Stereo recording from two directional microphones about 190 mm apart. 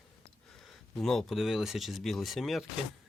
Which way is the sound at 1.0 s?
Centre (ahead or behind).